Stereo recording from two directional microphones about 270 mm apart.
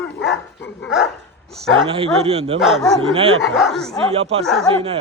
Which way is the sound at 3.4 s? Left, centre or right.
Centre.